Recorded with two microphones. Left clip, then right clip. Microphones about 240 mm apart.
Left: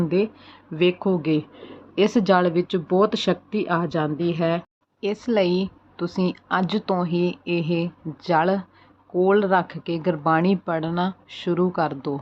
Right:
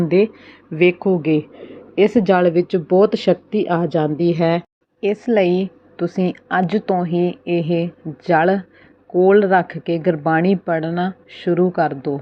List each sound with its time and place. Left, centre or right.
0.0 s speech: centre
4.2 s speech: centre
4.9 s speech: centre